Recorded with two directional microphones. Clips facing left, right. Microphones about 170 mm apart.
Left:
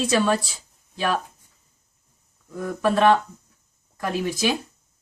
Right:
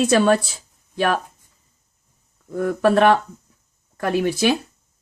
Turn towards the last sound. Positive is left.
turn(degrees=-60)  # may be behind; listen again after turning